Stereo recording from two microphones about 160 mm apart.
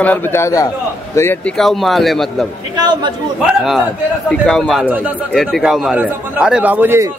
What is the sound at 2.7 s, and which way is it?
Speech, 25° right (ahead or behind).